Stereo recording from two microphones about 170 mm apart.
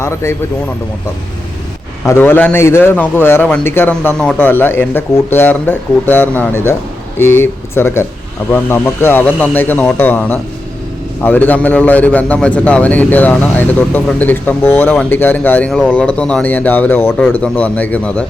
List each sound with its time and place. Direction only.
0.0 s a man's voice: 15° left (ahead or behind)
2.0 s a man's voice: 10° left (ahead or behind)